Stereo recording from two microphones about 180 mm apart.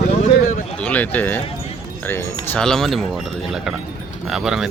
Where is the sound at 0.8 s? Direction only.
10° left (ahead or behind).